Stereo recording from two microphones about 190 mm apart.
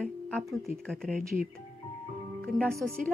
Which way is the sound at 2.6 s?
5° left (ahead or behind).